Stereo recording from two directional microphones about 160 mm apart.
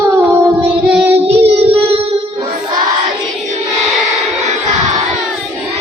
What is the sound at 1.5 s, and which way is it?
Child singing, 35° right (ahead or behind).